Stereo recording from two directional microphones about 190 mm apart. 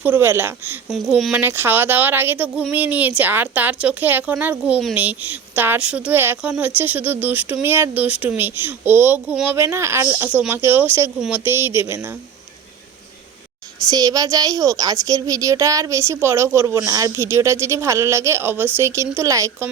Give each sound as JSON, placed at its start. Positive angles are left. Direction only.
{"t": 0.0, "sound": "speech", "side_deg": -10}
{"t": 0.9, "sound": "speech", "side_deg": 0}
{"t": 1.3, "sound": "speech", "side_deg": -10}
{"t": 13.9, "sound": "speech", "side_deg": -20}